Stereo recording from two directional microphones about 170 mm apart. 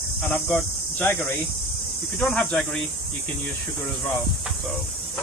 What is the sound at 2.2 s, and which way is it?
Speech, 5° left (ahead or behind).